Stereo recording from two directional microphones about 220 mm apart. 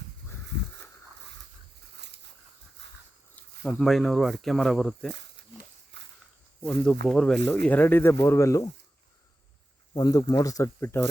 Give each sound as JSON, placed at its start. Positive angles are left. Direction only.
{"t": 2.8, "sound": "a sound", "side_deg": -50}
{"t": 3.3, "sound": "speech", "side_deg": 5}
{"t": 5.9, "sound": "walk", "side_deg": -55}
{"t": 6.6, "sound": "speech", "side_deg": 5}
{"t": 9.9, "sound": "speech", "side_deg": 15}